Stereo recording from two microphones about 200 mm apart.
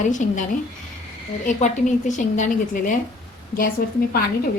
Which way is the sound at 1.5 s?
40° left (ahead or behind).